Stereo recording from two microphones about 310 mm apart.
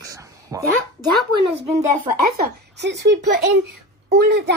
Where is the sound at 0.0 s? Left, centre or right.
Centre.